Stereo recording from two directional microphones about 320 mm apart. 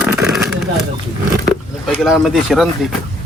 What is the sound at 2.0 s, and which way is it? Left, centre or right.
Speech, centre.